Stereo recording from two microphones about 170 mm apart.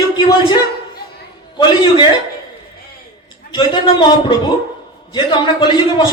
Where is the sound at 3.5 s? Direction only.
25° left (ahead or behind).